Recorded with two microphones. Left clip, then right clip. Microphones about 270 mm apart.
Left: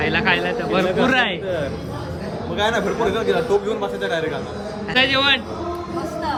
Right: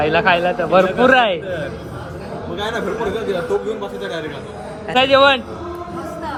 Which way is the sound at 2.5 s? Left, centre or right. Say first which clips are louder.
Left 2 dB; centre.